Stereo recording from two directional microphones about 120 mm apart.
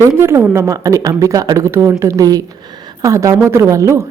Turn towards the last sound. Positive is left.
turn(degrees=-25)  # may be behind; listen again after turning